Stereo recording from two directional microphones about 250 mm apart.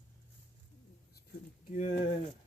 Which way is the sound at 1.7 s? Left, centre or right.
Left.